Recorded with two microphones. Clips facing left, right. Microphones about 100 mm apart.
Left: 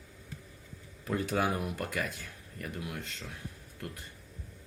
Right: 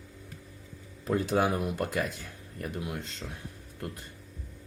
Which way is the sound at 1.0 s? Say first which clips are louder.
Right 4 dB; 25° right (ahead or behind).